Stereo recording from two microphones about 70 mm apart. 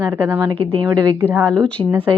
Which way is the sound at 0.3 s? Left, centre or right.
Right.